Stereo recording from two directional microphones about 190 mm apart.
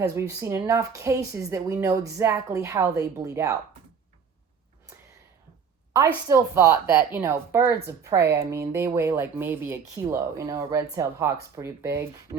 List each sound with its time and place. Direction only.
0.2 s speech: 15° right (ahead or behind)
6.2 s speech: 15° right (ahead or behind)